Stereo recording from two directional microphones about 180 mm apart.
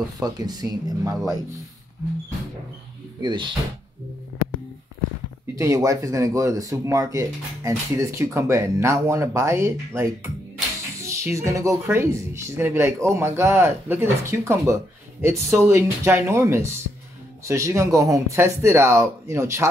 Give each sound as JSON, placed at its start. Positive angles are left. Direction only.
{"t": 0.2, "sound": "speech", "side_deg": -20}
{"t": 3.2, "sound": "speech", "side_deg": -25}
{"t": 5.6, "sound": "speech", "side_deg": -20}